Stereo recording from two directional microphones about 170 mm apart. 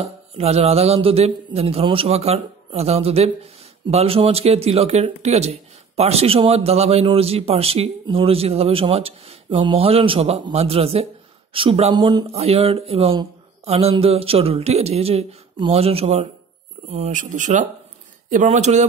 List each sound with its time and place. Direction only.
0.0 s speech: 35° right (ahead or behind)